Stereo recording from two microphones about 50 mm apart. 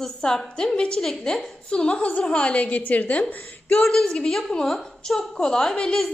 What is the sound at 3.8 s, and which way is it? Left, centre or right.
A woman's voice, centre.